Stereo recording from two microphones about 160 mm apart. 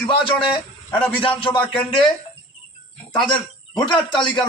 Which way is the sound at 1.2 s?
30° left (ahead or behind).